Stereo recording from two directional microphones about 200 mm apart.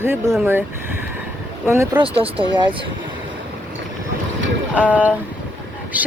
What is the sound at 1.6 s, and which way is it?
Speech, 15° right (ahead or behind).